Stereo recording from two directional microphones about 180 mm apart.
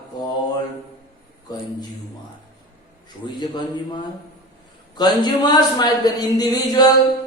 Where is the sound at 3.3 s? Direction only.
25° left (ahead or behind).